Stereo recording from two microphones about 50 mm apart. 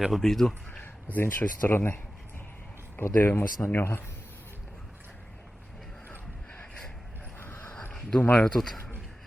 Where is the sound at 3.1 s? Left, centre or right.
Left.